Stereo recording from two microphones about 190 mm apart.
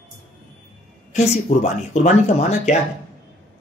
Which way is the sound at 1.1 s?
40° left (ahead or behind).